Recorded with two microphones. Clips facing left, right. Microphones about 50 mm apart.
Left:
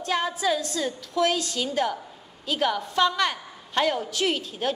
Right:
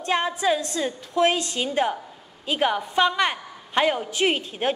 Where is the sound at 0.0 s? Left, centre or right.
Right.